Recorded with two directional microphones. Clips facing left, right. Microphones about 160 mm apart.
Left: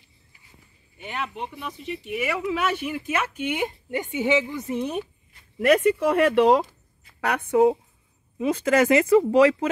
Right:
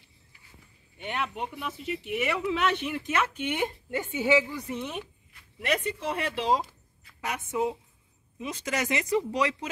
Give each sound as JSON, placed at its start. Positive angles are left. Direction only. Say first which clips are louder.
{"t": 0.9, "sound": "speech", "louder": "left 1 dB", "side_deg": 0}
{"t": 5.9, "sound": "speech", "louder": "left 12 dB", "side_deg": 60}